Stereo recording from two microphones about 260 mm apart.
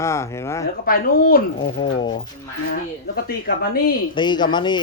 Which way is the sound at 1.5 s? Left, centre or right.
Centre.